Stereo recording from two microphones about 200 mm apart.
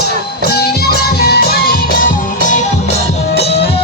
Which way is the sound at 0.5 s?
55° left (ahead or behind).